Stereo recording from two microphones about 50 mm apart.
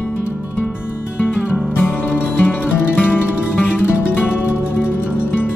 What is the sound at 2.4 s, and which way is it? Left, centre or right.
Music, left.